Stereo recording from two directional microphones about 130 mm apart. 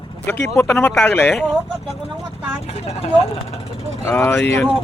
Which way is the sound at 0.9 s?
10° left (ahead or behind).